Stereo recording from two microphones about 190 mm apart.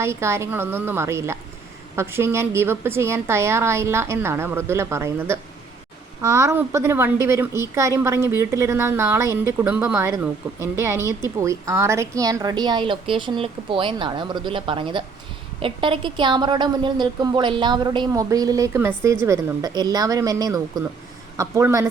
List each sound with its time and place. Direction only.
0.0 s a woman's voice: 15° right (ahead or behind)